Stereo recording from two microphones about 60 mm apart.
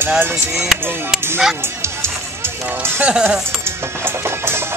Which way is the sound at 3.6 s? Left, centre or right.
Right.